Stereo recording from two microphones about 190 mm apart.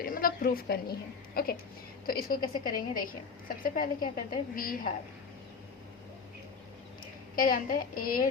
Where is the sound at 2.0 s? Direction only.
50° left (ahead or behind).